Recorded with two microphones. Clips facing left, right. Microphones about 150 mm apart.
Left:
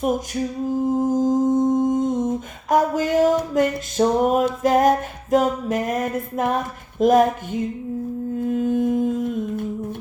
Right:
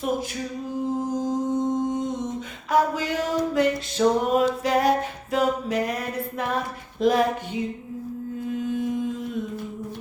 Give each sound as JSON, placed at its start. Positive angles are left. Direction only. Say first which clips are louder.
{"t": 0.7, "sound": "humming", "louder": "left 6 dB", "side_deg": 45}
{"t": 7.0, "sound": "a sound", "louder": "left 5 dB", "side_deg": 45}
{"t": 8.4, "sound": "humming", "louder": "left 7 dB", "side_deg": 50}